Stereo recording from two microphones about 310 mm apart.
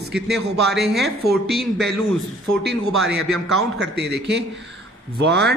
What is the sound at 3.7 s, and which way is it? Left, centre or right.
A man's voice, right.